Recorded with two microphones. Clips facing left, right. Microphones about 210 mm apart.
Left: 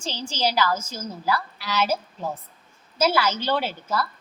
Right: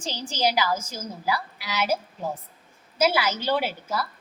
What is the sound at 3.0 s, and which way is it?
A woman's voice, 15° right (ahead or behind).